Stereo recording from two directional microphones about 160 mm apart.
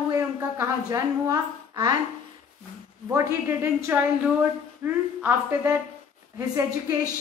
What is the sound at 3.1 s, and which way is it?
A woman's voice, 15° right (ahead or behind).